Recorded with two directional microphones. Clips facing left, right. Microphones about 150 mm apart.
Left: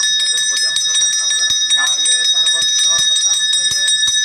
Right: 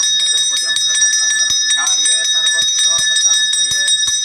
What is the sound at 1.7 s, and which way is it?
Bell, 30° left (ahead or behind).